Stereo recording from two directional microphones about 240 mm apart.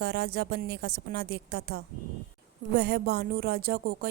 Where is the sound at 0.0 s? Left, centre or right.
Right.